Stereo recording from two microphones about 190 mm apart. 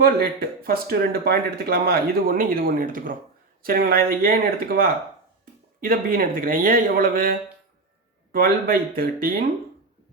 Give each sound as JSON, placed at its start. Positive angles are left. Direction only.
{"t": 0.0, "sound": "speech", "side_deg": -50}